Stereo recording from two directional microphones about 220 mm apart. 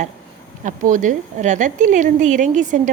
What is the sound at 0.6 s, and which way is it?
A woman's voice, 35° right (ahead or behind).